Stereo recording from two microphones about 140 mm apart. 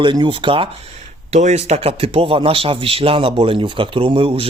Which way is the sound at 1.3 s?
55° right (ahead or behind).